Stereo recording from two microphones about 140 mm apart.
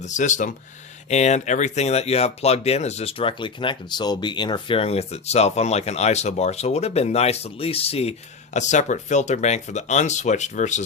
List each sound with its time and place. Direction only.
0.0 s speech: 60° left (ahead or behind)
8.5 s speech: 60° left (ahead or behind)